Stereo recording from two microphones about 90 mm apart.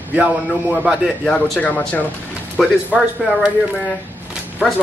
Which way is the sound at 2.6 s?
Centre (ahead or behind).